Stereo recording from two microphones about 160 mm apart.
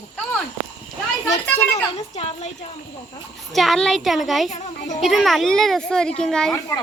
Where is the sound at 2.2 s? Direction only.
45° left (ahead or behind).